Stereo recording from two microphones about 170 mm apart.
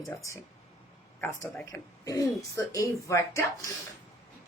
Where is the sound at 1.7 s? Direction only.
20° left (ahead or behind).